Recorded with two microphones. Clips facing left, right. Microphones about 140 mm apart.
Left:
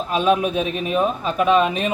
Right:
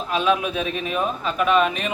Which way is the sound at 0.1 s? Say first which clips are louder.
Left 3 dB; 40° left (ahead or behind).